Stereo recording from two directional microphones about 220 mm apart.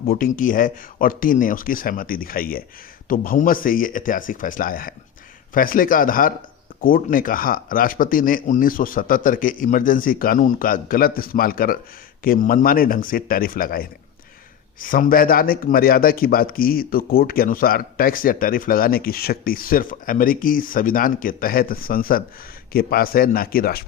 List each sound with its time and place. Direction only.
0.1 s speech: 40° left (ahead or behind)